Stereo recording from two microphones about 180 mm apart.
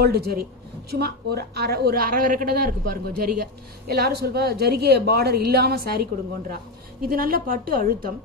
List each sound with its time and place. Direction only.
0.0 s a woman's voice: 65° right (ahead or behind)